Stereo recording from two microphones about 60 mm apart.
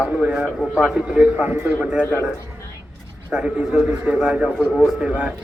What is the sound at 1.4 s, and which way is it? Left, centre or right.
Speech, right.